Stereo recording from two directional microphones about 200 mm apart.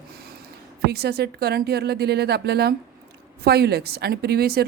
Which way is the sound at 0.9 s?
55° right (ahead or behind).